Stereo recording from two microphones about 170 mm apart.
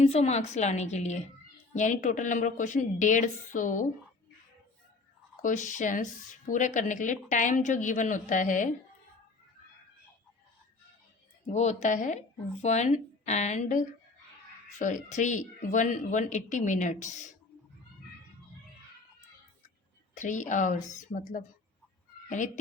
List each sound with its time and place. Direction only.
0.0 s a woman's voice: 40° left (ahead or behind)
5.4 s a woman's voice: 50° left (ahead or behind)
11.4 s a woman's voice: 40° left (ahead or behind)
20.1 s a woman's voice: 45° left (ahead or behind)